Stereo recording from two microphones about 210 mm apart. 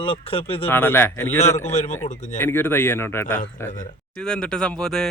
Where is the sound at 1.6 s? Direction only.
30° left (ahead or behind).